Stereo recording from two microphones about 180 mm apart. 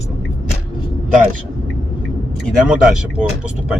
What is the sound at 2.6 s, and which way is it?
Speech, 5° right (ahead or behind).